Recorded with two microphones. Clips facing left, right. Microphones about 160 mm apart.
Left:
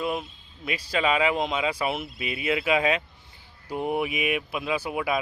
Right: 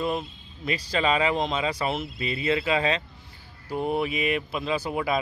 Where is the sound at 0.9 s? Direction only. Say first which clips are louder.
Even; 5° left (ahead or behind).